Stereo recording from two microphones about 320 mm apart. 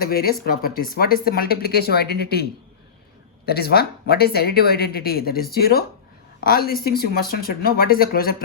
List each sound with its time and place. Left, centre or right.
0.0 s speech: left